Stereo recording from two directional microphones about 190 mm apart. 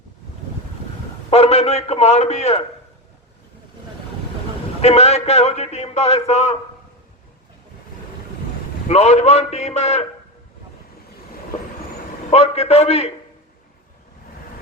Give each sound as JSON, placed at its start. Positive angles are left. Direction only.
{"t": 1.3, "sound": "a man's voice", "side_deg": 30}
{"t": 4.8, "sound": "a man's voice", "side_deg": 35}
{"t": 8.9, "sound": "a man's voice", "side_deg": 35}
{"t": 12.3, "sound": "a man's voice", "side_deg": 35}